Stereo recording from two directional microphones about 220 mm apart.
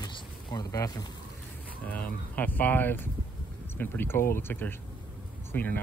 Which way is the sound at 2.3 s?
10° left (ahead or behind).